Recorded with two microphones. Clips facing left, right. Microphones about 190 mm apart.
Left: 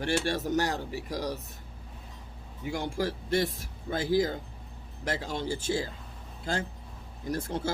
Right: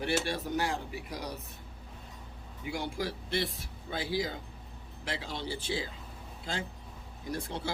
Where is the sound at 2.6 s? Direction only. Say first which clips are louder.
Left 4 dB; 45° left (ahead or behind).